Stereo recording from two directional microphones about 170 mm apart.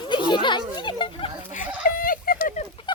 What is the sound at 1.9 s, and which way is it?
Fowl, 55° left (ahead or behind).